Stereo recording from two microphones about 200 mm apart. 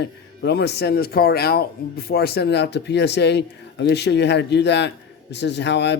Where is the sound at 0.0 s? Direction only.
55° left (ahead or behind).